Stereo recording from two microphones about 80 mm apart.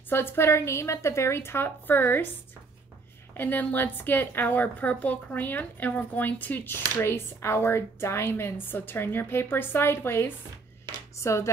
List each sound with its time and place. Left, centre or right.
0.1 s a woman's voice: left
3.3 s a woman's voice: left